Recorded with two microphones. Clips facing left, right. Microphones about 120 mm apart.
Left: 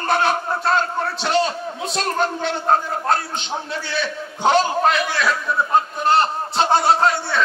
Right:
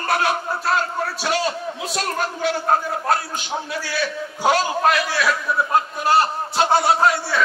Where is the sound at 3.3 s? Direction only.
25° left (ahead or behind).